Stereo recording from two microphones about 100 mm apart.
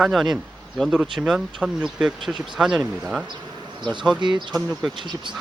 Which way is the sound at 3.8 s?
50° right (ahead or behind).